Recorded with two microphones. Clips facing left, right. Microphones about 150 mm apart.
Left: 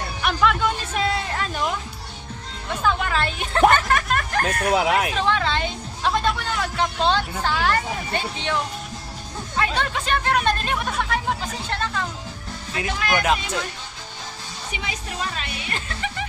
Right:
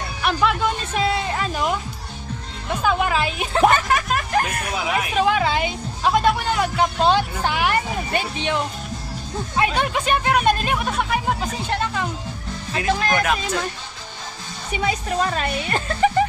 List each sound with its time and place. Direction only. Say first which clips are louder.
0.2 s music: right 1 dB; centre (ahead or behind)
2.8 s speech: right 2 dB; 10° right (ahead or behind)
4.7 s speech: left 6 dB; 65° left (ahead or behind)
5.1 s speech: right 3 dB; 10° right (ahead or behind)
9.6 s speech: right 3 dB; 15° right (ahead or behind)
10.9 s speech: right 2 dB; centre (ahead or behind)
11.7 s speech: right 2 dB; 15° right (ahead or behind)
13.0 s speech: right 2 dB; 35° right (ahead or behind)
14.8 s a woman's voice: right 10 dB; 50° right (ahead or behind)